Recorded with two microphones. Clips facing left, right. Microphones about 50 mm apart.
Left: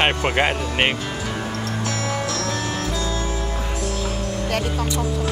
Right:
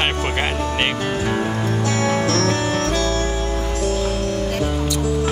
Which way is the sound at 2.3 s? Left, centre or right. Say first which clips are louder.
Right 6 dB; right.